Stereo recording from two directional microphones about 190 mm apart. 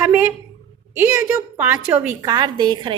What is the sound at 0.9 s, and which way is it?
A woman's voice, 10° right (ahead or behind).